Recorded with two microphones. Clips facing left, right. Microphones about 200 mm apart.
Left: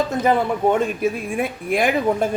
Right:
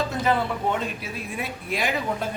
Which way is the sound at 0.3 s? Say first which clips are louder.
Left 7 dB; 50° left (ahead or behind).